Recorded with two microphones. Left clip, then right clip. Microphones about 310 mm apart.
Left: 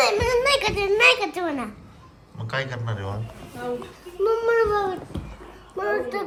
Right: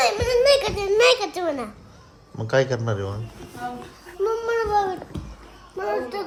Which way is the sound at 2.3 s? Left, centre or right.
Centre.